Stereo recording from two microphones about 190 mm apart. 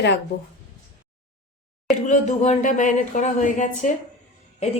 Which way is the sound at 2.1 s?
40° left (ahead or behind).